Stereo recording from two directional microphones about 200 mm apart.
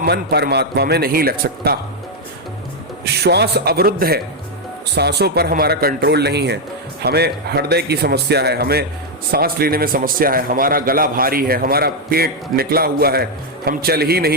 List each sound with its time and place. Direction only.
0.0 s a man's voice: 55° right (ahead or behind)
3.0 s a man's voice: 55° right (ahead or behind)